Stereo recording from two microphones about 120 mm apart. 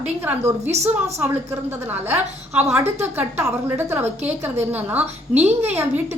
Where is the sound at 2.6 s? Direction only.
20° right (ahead or behind).